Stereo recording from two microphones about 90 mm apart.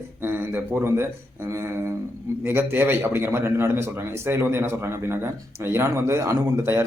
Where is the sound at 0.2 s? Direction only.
25° right (ahead or behind).